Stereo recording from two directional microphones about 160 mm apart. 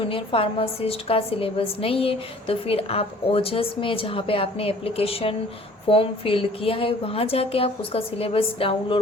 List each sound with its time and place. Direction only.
0.1 s a woman's voice: 35° left (ahead or behind)